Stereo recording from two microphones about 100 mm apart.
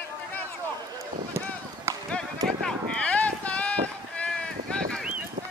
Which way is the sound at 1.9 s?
30° right (ahead or behind).